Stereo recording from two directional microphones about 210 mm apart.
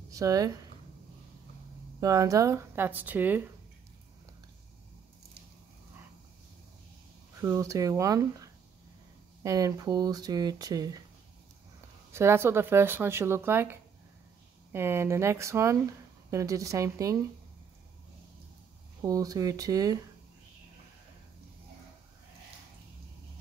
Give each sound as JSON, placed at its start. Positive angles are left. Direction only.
{"t": 0.1, "sound": "speech", "side_deg": -15}
{"t": 2.0, "sound": "speech", "side_deg": -15}
{"t": 7.3, "sound": "speech", "side_deg": -15}
{"t": 9.4, "sound": "speech", "side_deg": -15}
{"t": 12.1, "sound": "speech", "side_deg": -10}
{"t": 18.9, "sound": "speech", "side_deg": -15}